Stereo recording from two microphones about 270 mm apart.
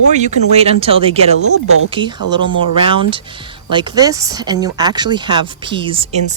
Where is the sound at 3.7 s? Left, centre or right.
Centre.